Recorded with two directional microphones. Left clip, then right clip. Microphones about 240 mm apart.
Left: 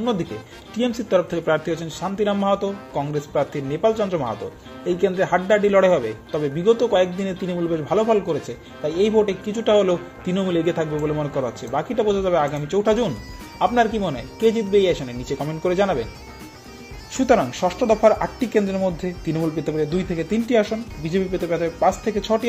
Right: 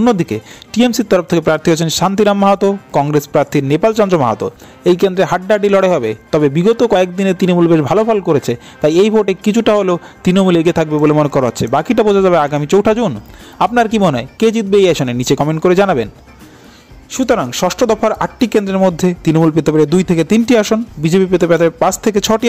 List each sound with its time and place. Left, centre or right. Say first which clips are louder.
0.0 s a man's voice: right 11 dB; right
17.1 s a man's voice: right 4 dB; right